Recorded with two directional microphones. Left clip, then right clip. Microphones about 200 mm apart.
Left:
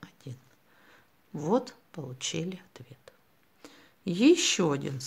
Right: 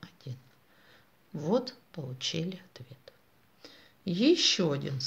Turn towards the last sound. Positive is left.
turn(degrees=30)  # may be behind; listen again after turning